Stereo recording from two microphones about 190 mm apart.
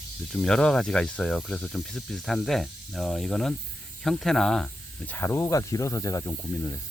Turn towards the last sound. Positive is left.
turn(degrees=15)  # may be behind; listen again after turning